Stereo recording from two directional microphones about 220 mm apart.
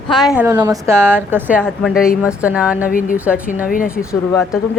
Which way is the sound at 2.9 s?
35° left (ahead or behind).